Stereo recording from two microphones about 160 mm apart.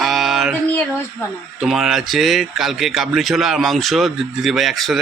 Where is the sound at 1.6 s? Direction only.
Centre (ahead or behind).